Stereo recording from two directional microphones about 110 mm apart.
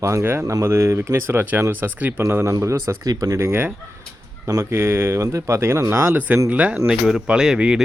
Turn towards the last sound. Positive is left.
turn(degrees=-5)  # may be behind; listen again after turning